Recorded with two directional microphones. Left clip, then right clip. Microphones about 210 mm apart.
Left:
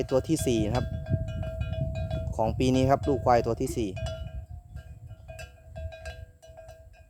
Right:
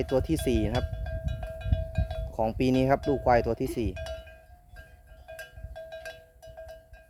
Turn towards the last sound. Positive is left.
turn(degrees=0)  # may be behind; listen again after turning